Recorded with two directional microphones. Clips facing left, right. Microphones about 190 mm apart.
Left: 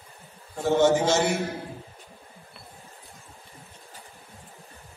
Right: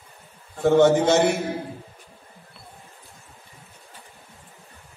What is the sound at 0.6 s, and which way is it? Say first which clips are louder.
Speech: right 4 dB; 60° right (ahead or behind).